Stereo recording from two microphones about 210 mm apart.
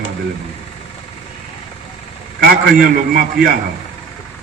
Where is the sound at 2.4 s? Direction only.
45° right (ahead or behind).